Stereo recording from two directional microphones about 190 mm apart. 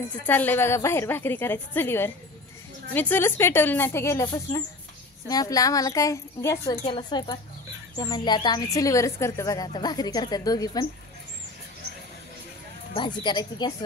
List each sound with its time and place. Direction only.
0.3 s a woman's voice: 10° left (ahead or behind)
5.3 s a woman's voice: 20° left (ahead or behind)
12.9 s speech: 25° left (ahead or behind)